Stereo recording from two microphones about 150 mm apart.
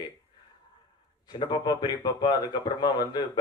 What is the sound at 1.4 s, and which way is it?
Speech, 30° left (ahead or behind).